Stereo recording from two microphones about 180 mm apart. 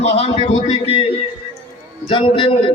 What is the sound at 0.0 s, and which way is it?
A man's voice, 35° left (ahead or behind).